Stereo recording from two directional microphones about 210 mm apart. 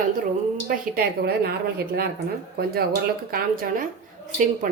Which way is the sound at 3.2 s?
45° right (ahead or behind).